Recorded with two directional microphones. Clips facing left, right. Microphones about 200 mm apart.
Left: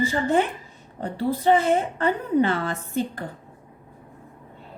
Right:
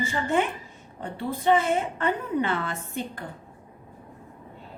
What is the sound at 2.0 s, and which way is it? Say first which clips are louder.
A woman's voice: left 5 dB; 35° left (ahead or behind).